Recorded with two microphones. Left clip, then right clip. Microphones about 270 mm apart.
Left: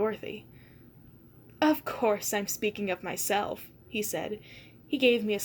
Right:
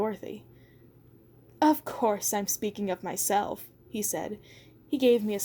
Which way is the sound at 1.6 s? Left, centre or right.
Right.